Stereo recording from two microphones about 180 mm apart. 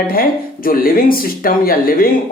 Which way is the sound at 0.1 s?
55° left (ahead or behind).